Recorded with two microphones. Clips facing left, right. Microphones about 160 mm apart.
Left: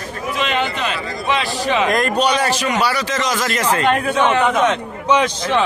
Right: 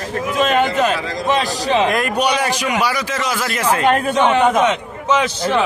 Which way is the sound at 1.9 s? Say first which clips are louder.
Left 1 dB; 10° right (ahead or behind).